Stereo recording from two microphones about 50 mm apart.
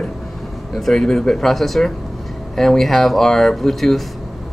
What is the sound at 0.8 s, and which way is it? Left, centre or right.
Speech, centre.